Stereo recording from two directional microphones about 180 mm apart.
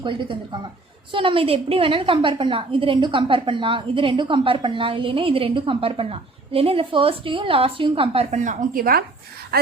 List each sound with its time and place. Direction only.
0.0 s a woman's voice: 25° right (ahead or behind); by 9.0 s 55° right (ahead or behind)